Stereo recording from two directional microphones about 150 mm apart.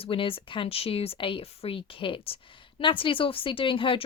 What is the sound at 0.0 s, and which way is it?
Speech, 35° left (ahead or behind).